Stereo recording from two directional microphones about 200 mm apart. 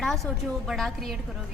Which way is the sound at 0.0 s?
Centre (ahead or behind).